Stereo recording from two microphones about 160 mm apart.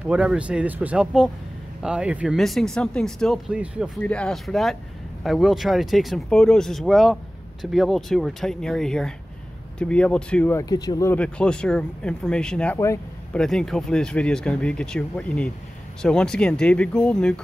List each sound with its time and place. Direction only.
0.1 s speech: 5° right (ahead or behind)
4.0 s speech: 5° left (ahead or behind)
10.6 s speech: 25° left (ahead or behind)
11.1 s speech: 5° left (ahead or behind)
12.7 s speech: 20° left (ahead or behind)
13.3 s speech: 5° left (ahead or behind)